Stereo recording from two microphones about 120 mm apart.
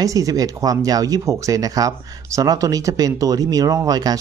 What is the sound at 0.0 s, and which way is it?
Speech, 30° right (ahead or behind).